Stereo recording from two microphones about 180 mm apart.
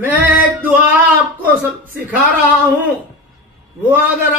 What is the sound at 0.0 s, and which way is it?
Music, 10° right (ahead or behind).